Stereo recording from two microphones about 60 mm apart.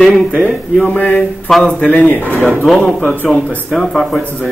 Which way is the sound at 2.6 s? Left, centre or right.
Centre.